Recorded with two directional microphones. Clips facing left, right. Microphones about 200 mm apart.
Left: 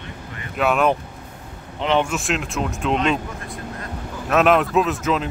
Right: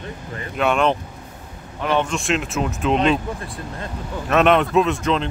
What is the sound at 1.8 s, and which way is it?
Speech, 20° left (ahead or behind).